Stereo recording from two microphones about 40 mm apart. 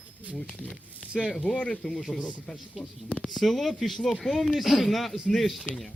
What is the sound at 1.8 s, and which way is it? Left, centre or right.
Speech, left.